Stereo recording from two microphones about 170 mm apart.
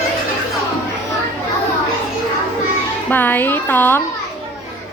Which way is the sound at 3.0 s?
10° left (ahead or behind).